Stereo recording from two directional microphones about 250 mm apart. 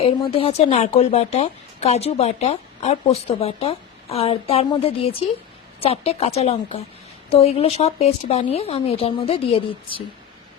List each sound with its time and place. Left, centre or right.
0.0 s a woman's voice: left